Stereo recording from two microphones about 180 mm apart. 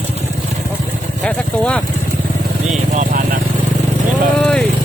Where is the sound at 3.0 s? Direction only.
50° right (ahead or behind).